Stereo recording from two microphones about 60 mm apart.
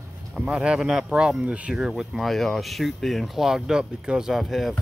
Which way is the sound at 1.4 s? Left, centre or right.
Right.